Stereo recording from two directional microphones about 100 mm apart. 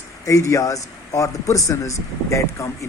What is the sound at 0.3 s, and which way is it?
Speech, 30° left (ahead or behind).